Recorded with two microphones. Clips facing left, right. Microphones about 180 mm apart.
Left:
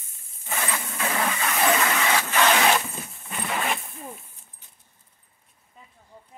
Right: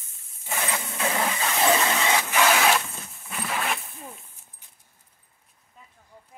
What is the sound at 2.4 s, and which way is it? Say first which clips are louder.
Zipper: left 1 dB; 5° right (ahead or behind).